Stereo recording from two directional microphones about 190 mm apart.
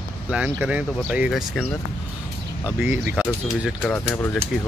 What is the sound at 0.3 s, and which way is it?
Speech, 5° right (ahead or behind).